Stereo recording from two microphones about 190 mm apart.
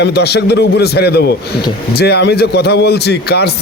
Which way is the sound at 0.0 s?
60° left (ahead or behind).